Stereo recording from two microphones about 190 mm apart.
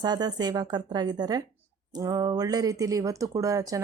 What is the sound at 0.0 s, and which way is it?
A woman's voice, 20° right (ahead or behind).